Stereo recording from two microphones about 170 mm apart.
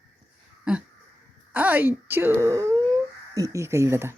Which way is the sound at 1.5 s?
10° right (ahead or behind).